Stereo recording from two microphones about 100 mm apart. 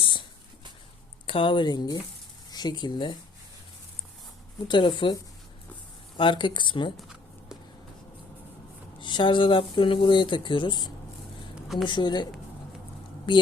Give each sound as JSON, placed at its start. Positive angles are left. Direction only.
{"t": 0.0, "sound": "a sound", "side_deg": 55}
{"t": 1.3, "sound": "speech", "side_deg": 55}
{"t": 4.7, "sound": "speech", "side_deg": 55}
{"t": 6.1, "sound": "speech", "side_deg": 55}
{"t": 9.0, "sound": "speech", "side_deg": 50}
{"t": 13.3, "sound": "speech", "side_deg": 60}